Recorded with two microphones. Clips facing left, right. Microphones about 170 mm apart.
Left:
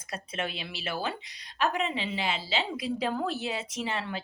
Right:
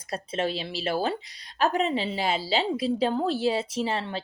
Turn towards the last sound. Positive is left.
turn(degrees=-30)  # may be behind; listen again after turning